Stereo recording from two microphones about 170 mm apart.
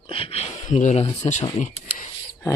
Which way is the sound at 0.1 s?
35° left (ahead or behind).